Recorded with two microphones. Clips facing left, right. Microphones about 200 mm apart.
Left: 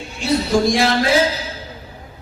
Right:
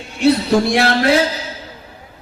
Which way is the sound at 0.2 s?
60° right (ahead or behind).